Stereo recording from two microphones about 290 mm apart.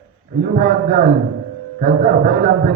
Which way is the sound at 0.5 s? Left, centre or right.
Right.